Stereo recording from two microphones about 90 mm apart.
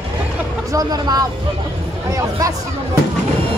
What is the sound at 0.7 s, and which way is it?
Speech, 45° right (ahead or behind).